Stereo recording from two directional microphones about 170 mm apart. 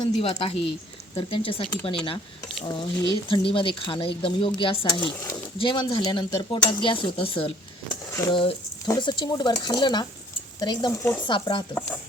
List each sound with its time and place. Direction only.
0.2 s speech: 30° left (ahead or behind)
5.1 s speech: 20° left (ahead or behind)
11.3 s speech: 30° left (ahead or behind)